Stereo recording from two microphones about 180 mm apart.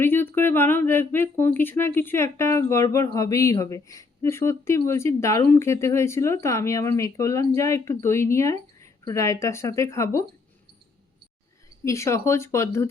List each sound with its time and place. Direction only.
0.0 s speech: 10° left (ahead or behind)
11.9 s speech: 15° left (ahead or behind)